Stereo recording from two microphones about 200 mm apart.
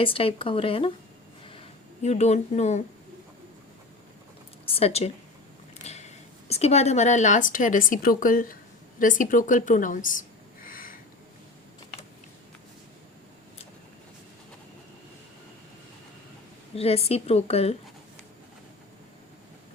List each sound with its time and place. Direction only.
0.0 s speech: 25° left (ahead or behind)
2.0 s a woman's voice: 35° left (ahead or behind)
4.6 s a woman's voice: 30° left (ahead or behind)
16.7 s a woman's voice: 30° left (ahead or behind)